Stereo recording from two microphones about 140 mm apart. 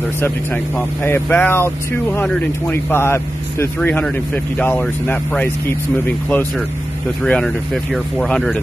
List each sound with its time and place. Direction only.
0.7 s speech: 15° left (ahead or behind)